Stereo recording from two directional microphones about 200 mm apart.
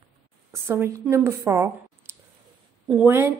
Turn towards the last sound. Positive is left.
turn(degrees=-10)  # may be behind; listen again after turning